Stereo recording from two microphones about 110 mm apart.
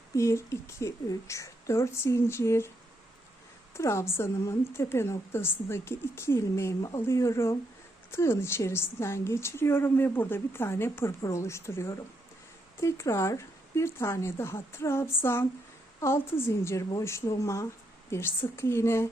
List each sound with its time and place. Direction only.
0.2 s a woman's voice: 25° left (ahead or behind)
3.8 s a woman's voice: 25° left (ahead or behind)